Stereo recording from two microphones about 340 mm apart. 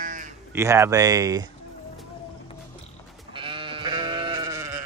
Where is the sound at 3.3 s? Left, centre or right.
Centre.